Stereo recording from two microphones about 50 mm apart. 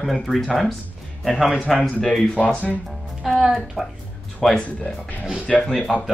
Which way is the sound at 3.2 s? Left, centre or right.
Centre.